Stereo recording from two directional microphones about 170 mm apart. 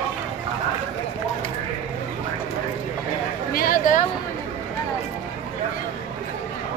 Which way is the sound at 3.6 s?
55° left (ahead or behind).